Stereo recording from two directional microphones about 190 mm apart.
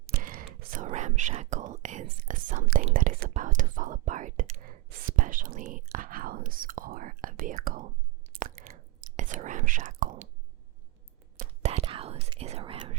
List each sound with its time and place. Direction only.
0.0 s whispering: 50° right (ahead or behind)
8.3 s chewing: 45° right (ahead or behind)
9.1 s whispering: 40° right (ahead or behind)
11.6 s whispering: 35° right (ahead or behind)